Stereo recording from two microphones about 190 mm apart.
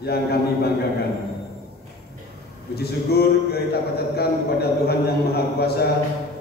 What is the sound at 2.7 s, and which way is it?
Mantra, 55° left (ahead or behind).